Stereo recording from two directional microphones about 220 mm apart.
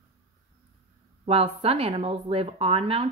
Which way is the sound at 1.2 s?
25° right (ahead or behind).